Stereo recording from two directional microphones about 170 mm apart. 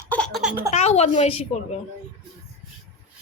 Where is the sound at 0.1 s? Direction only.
5° left (ahead or behind).